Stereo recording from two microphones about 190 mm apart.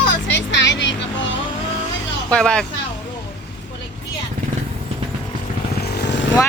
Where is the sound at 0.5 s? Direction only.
70° left (ahead or behind).